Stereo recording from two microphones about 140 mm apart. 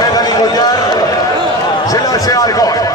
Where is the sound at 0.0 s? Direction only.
30° left (ahead or behind).